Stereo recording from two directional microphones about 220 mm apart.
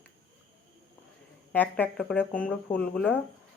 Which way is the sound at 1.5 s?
10° left (ahead or behind).